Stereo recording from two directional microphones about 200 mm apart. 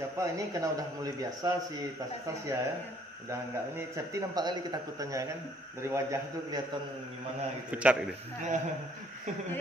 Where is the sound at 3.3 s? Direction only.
15° right (ahead or behind).